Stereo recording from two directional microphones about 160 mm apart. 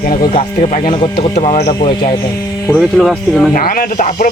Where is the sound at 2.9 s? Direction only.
Centre (ahead or behind).